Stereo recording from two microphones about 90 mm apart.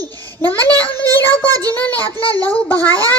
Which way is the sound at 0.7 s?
20° left (ahead or behind).